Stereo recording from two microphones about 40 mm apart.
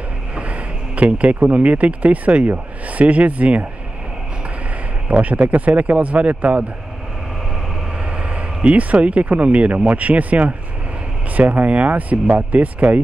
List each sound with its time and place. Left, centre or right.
0.4 s speech: right
5.0 s speech: right
8.6 s speech: right